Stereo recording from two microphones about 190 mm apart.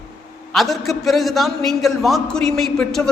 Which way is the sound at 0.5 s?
Centre (ahead or behind).